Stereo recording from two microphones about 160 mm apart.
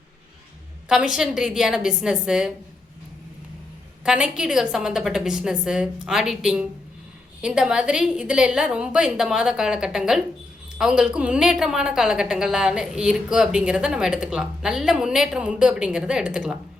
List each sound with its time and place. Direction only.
0.9 s a woman's voice: 5° right (ahead or behind)
4.0 s a woman's voice: 5° right (ahead or behind)